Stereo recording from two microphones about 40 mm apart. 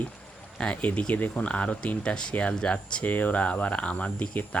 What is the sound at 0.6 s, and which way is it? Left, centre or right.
Speech, left.